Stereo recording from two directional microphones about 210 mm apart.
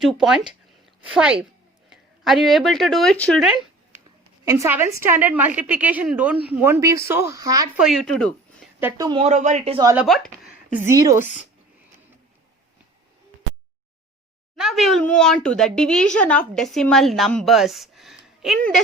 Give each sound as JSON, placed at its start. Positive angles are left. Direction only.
{"t": 0.0, "sound": "a woman's voice", "side_deg": 0}
{"t": 4.4, "sound": "a woman's voice", "side_deg": -15}
{"t": 7.8, "sound": "a woman's voice", "side_deg": 0}
{"t": 8.8, "sound": "a woman's voice", "side_deg": -15}
{"t": 9.1, "sound": "speech", "side_deg": -30}
{"t": 9.7, "sound": "a woman's voice", "side_deg": -15}
{"t": 10.0, "sound": "speech", "side_deg": 0}
{"t": 10.8, "sound": "a woman's voice", "side_deg": -15}
{"t": 11.2, "sound": "speech", "side_deg": 35}
{"t": 14.5, "sound": "a woman's voice", "side_deg": 0}